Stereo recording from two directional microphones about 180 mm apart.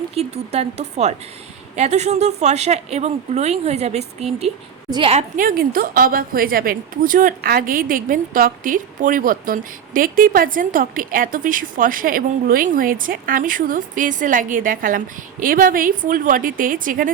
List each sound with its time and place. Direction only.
0.1 s a woman's voice: 35° right (ahead or behind)
5.4 s a woman's voice: 50° right (ahead or behind)